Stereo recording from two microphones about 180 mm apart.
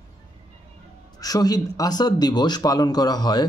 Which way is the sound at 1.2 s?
20° left (ahead or behind).